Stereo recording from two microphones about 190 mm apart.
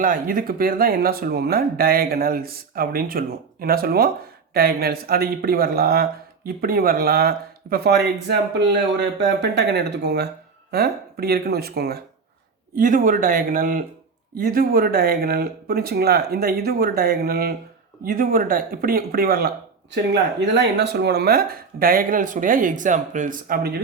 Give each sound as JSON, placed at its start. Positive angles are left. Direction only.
{"t": 0.0, "sound": "speech", "side_deg": -45}